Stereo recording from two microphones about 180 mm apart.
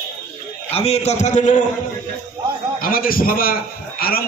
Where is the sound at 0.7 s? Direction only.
35° left (ahead or behind).